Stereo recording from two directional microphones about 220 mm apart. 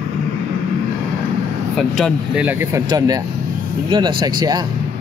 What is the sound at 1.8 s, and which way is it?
Speech, centre (ahead or behind).